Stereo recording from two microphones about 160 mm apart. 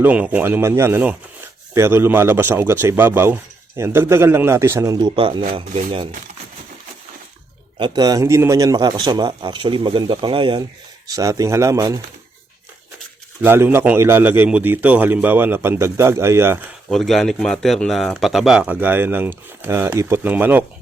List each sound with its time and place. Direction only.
0.0 s speech: 10° right (ahead or behind); by 5.4 s 30° right (ahead or behind)
7.8 s a man's voice: 30° right (ahead or behind)
11.1 s a man's voice: 20° right (ahead or behind)
13.4 s speech: 15° right (ahead or behind)
16.9 s speech: centre (ahead or behind)